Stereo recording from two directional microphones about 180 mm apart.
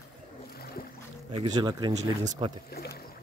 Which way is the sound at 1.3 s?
25° right (ahead or behind).